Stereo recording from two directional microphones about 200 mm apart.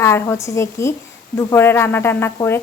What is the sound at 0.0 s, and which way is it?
A woman's voice, 15° left (ahead or behind).